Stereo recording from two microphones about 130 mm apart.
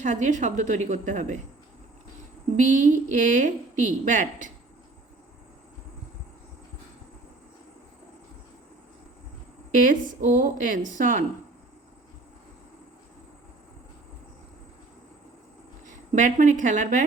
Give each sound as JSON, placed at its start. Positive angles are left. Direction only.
{"t": 0.0, "sound": "a woman's voice", "side_deg": -70}
{"t": 2.6, "sound": "a woman's voice", "side_deg": -75}
{"t": 9.8, "sound": "a woman's voice", "side_deg": -90}
{"t": 15.9, "sound": "a woman's voice", "side_deg": -75}